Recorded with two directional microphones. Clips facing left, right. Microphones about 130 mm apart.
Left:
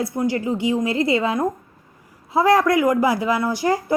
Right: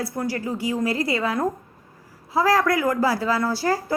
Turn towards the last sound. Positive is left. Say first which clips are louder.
# left 3 dB
turn(degrees=20)  # may be behind; listen again after turning